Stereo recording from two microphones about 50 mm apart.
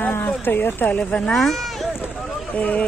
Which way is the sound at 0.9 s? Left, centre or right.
Left.